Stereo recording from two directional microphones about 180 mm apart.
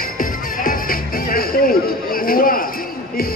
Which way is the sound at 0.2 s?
50° left (ahead or behind).